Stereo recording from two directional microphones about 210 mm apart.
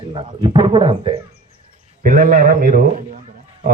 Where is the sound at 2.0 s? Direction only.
40° right (ahead or behind).